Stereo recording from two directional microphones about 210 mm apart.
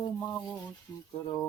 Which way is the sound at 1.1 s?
20° left (ahead or behind).